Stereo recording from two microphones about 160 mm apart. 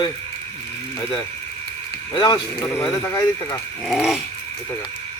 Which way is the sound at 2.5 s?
10° left (ahead or behind).